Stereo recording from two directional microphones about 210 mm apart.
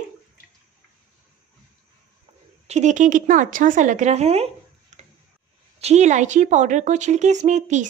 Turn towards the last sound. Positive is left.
turn(degrees=-35)  # may be behind; listen again after turning